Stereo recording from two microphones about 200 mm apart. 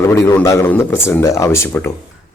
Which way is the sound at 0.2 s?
15° left (ahead or behind).